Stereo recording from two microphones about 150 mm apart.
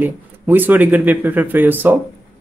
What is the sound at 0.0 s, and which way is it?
Speech, 10° right (ahead or behind).